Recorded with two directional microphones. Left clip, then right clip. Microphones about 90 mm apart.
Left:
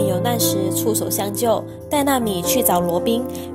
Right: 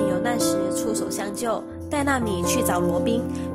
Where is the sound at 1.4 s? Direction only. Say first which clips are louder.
Left 10 dB; 45° left (ahead or behind).